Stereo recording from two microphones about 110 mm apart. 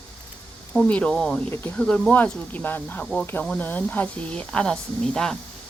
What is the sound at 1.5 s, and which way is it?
Speech, 20° left (ahead or behind).